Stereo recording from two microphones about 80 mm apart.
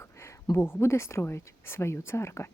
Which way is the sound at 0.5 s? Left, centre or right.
Left.